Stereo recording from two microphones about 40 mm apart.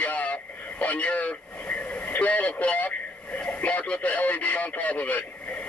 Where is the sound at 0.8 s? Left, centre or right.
Left.